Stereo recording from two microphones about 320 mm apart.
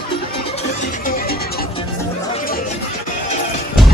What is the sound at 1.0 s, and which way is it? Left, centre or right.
Music, left.